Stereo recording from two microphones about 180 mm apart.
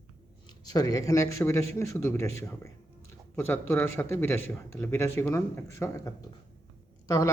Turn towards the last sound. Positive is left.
turn(degrees=20)  # may be behind; listen again after turning